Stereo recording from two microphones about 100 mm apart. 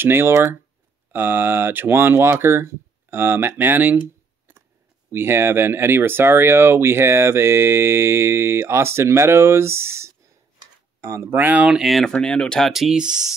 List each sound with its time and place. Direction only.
0.0 s speech: 20° right (ahead or behind)
5.1 s speech: 25° right (ahead or behind)
11.7 s speech: centre (ahead or behind)